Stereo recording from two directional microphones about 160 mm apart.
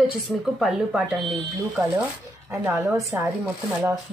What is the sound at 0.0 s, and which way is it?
A woman's voice, centre (ahead or behind).